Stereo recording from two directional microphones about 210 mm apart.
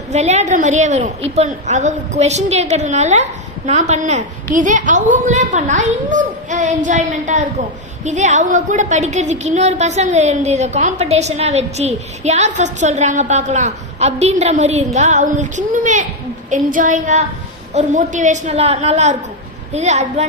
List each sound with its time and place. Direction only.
0.1 s a woman's voice: 30° right (ahead or behind)